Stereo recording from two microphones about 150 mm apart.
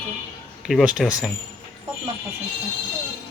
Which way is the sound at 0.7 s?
5° right (ahead or behind).